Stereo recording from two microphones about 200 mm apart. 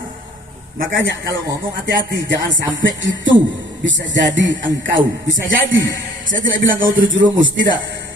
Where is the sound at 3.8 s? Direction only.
65° right (ahead or behind).